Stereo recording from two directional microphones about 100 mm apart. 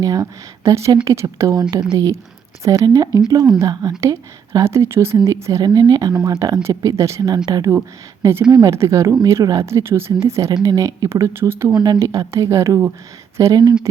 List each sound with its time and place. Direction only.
0.0 s speech: 35° right (ahead or behind)
5.6 s speech: 40° right (ahead or behind)
6.6 s speech: 30° right (ahead or behind); by 7.7 s 45° right (ahead or behind)
8.2 s speech: 25° right (ahead or behind)
8.4 s speech: 45° right (ahead or behind)
8.7 s speech: 30° right (ahead or behind)
11.7 s speech: 45° right (ahead or behind)
11.9 s speech: 30° right (ahead or behind)